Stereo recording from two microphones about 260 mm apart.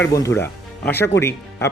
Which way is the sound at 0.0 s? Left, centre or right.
Centre.